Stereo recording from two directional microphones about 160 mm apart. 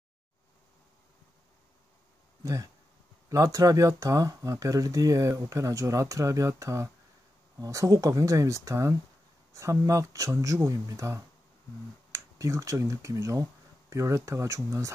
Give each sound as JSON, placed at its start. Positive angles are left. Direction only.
{"t": 2.4, "sound": "speech", "side_deg": -20}